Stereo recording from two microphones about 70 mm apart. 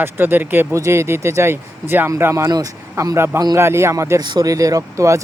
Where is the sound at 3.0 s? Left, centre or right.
Right.